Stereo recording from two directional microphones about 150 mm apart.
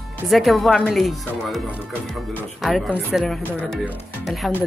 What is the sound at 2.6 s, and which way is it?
Speech, centre (ahead or behind).